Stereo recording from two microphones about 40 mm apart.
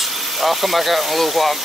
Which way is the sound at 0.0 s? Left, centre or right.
Centre.